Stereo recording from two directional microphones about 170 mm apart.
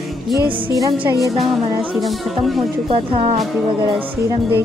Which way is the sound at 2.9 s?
35° right (ahead or behind).